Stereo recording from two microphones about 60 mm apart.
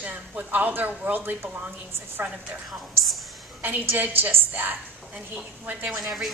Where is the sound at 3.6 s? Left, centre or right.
Right.